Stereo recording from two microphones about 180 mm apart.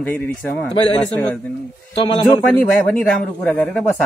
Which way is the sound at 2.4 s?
10° left (ahead or behind).